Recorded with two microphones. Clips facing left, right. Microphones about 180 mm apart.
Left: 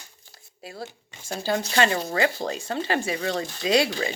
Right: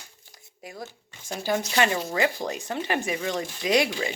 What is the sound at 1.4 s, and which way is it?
Speech, 15° right (ahead or behind).